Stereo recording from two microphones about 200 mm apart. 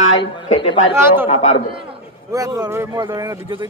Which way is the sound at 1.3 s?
35° left (ahead or behind).